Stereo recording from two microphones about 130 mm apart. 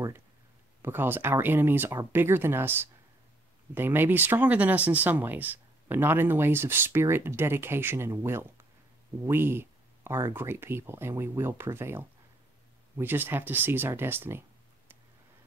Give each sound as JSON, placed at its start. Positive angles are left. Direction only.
{"t": 0.8, "sound": "speech", "side_deg": -15}